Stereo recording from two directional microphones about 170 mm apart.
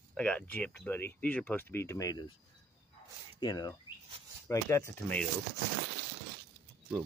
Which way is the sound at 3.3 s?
25° left (ahead or behind).